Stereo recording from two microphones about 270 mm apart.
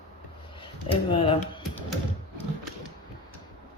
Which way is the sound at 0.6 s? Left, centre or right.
Centre.